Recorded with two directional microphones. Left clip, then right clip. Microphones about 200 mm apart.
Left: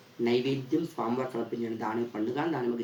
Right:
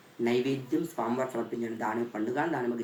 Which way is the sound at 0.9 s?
5° right (ahead or behind).